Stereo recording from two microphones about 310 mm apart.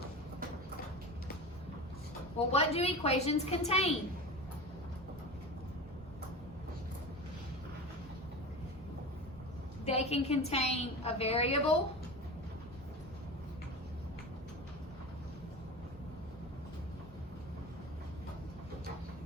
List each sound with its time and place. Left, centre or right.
2.5 s a woman's voice: centre
9.8 s a woman's voice: centre